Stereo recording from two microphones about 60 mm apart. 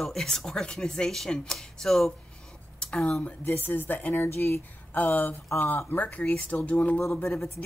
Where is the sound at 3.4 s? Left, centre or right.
Left.